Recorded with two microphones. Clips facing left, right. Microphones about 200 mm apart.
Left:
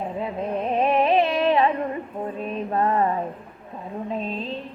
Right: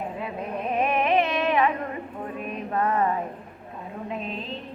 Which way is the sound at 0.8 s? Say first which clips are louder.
Left 3 dB; 30° left (ahead or behind).